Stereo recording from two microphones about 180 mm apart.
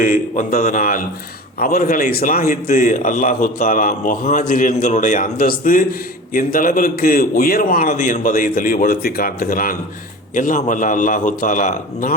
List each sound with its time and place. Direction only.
0.0 s a man's voice: 50° left (ahead or behind)